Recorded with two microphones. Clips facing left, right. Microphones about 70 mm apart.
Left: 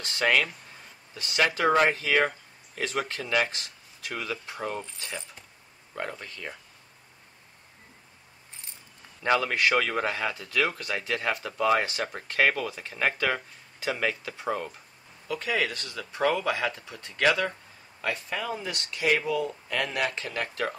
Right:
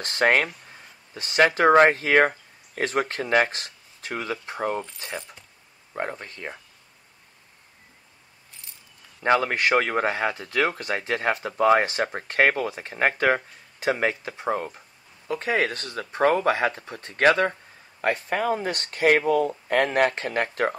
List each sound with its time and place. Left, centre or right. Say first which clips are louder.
0.0 s speech: right 4 dB; right
9.2 s speech: right 3 dB; right